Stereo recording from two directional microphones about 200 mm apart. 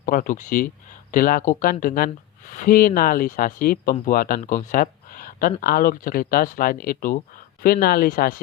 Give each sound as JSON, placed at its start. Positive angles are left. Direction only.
{"t": 0.0, "sound": "speech", "side_deg": 40}